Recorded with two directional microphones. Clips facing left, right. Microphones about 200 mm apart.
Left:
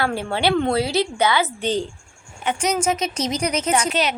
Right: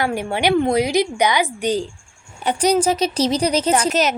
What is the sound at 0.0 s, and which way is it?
A woman's voice, 15° right (ahead or behind).